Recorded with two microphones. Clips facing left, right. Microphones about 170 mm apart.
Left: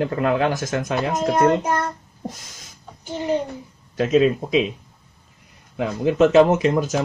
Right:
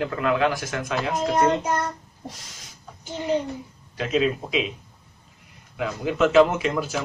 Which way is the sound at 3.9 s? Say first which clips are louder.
Left 6 dB; 40° left (ahead or behind).